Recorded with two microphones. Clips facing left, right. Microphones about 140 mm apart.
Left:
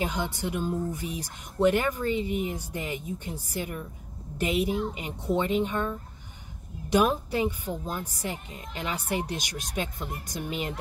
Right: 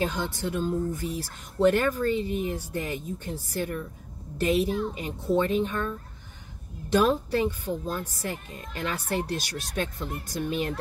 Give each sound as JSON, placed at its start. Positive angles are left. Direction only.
{"t": 0.0, "sound": "speech", "side_deg": 15}